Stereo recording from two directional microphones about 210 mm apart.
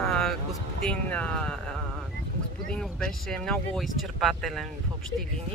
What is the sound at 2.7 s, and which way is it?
Speech, 5° left (ahead or behind).